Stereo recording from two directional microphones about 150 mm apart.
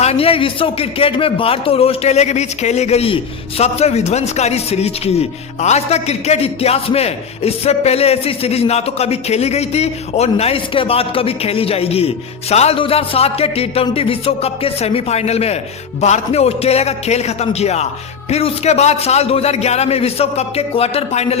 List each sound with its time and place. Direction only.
0.0 s a man's voice: 40° left (ahead or behind)